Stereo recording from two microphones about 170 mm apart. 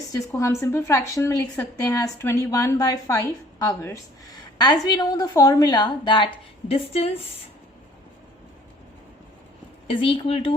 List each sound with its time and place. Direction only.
0.3 s a woman's voice: 15° left (ahead or behind); by 7.2 s 35° left (ahead or behind)
9.8 s speech: 30° left (ahead or behind)